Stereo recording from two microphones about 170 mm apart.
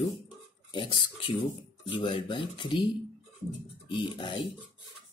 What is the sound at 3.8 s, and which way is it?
Speech, 25° left (ahead or behind).